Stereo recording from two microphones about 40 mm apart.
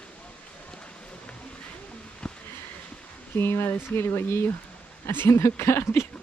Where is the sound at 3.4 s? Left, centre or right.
Left.